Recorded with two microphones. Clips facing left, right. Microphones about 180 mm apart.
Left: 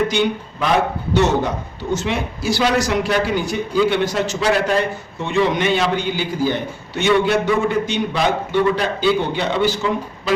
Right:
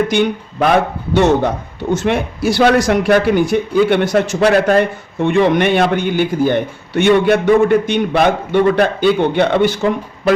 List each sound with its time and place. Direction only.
0.6 s a man's voice: 55° right (ahead or behind)